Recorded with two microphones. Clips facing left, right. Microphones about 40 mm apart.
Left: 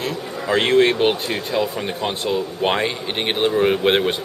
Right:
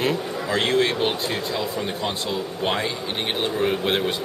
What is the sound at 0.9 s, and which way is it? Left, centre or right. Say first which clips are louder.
Speech: left 4 dB; centre.